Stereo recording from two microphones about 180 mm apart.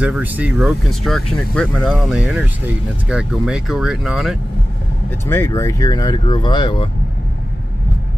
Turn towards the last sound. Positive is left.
turn(degrees=25)  # may be behind; listen again after turning